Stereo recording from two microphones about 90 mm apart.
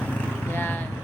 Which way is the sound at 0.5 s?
20° left (ahead or behind).